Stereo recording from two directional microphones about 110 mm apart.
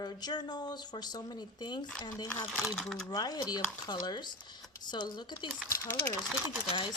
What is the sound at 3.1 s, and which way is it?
Speech, 35° left (ahead or behind).